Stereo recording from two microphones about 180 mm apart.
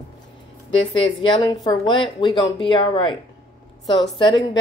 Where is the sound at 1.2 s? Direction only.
25° left (ahead or behind).